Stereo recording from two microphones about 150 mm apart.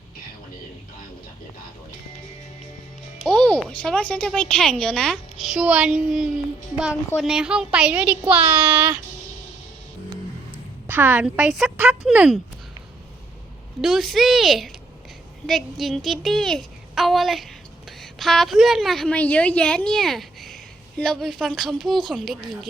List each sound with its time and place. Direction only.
3.2 s speech: 5° left (ahead or behind)
5.5 s a woman's voice: 5° right (ahead or behind)
10.8 s speech: 10° right (ahead or behind)
13.8 s a woman's voice: centre (ahead or behind)